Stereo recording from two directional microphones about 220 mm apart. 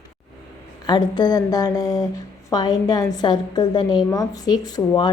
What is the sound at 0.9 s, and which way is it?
A woman's voice, 20° left (ahead or behind).